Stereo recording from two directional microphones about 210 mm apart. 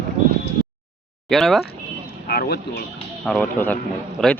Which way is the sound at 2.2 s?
50° left (ahead or behind).